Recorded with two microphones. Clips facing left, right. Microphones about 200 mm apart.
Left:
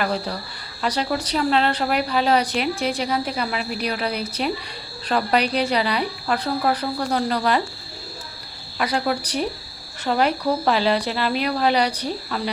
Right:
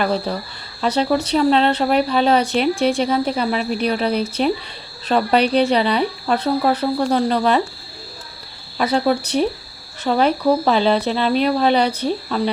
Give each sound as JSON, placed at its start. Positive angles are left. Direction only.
{"t": 0.8, "sound": "a woman's voice", "side_deg": -25}
{"t": 8.8, "sound": "a woman's voice", "side_deg": -25}